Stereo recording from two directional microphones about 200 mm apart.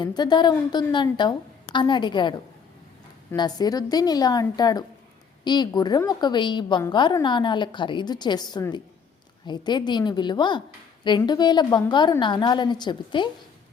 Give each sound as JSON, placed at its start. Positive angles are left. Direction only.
{"t": 0.0, "sound": "a woman's voice", "side_deg": 20}
{"t": 3.3, "sound": "a woman's voice", "side_deg": 20}